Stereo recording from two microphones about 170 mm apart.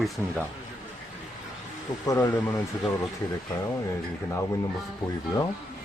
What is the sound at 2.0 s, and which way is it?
Speech, 20° left (ahead or behind).